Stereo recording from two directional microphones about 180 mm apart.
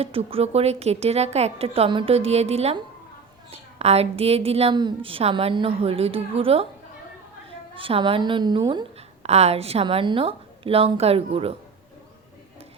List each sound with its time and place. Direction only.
0.0 s a woman's voice: 30° right (ahead or behind)
7.8 s a woman's voice: 30° right (ahead or behind)
9.2 s a woman's voice: 35° right (ahead or behind)